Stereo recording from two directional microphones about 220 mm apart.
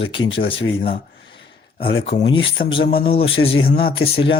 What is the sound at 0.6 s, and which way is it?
Speech, 25° left (ahead or behind).